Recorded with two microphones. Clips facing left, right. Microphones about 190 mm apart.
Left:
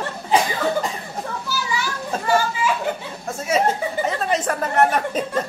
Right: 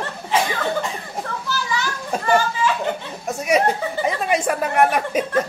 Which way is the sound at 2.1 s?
15° right (ahead or behind).